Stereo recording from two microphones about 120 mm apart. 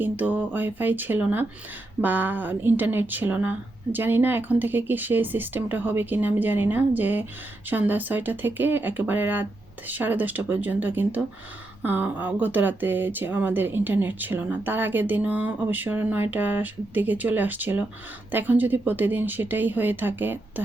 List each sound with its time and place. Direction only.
0.0 s speech: 15° right (ahead or behind)